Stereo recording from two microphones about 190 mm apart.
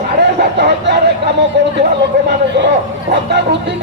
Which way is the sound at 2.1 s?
60° right (ahead or behind).